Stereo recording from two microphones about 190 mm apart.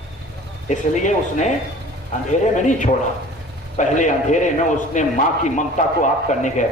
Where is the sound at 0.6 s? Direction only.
40° left (ahead or behind).